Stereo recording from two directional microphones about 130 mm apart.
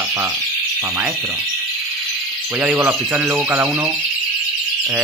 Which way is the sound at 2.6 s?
15° right (ahead or behind).